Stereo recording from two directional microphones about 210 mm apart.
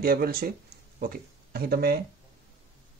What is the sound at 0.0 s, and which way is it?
Speech, 45° right (ahead or behind).